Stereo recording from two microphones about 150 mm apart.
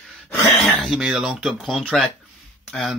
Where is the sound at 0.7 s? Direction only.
5° right (ahead or behind).